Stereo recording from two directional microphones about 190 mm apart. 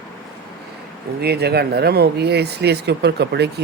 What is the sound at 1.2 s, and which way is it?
Speech, 60° right (ahead or behind).